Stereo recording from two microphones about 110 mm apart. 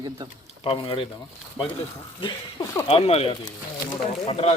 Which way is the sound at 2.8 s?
65° left (ahead or behind).